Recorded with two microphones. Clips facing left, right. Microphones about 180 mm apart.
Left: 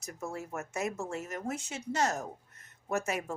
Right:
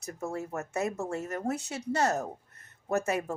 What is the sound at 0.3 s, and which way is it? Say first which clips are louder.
A woman's voice: right 4 dB; 35° right (ahead or behind).